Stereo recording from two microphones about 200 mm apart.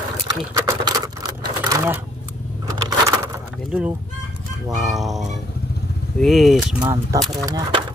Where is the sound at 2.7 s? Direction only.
20° right (ahead or behind).